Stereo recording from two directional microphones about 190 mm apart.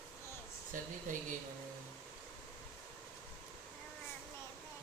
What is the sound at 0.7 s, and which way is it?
Speech, 40° right (ahead or behind).